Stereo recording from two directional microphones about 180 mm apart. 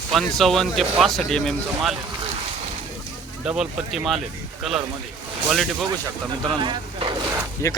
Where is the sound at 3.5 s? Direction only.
5° right (ahead or behind).